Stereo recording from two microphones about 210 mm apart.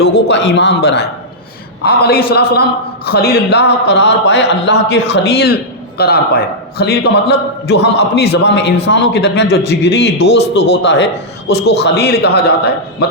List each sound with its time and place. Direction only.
0.0 s a man's voice: 55° left (ahead or behind)